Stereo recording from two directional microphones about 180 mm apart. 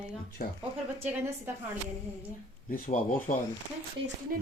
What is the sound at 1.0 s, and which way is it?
Speech, 10° right (ahead or behind).